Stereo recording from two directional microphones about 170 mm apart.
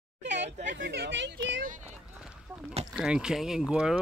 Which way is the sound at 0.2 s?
90° right.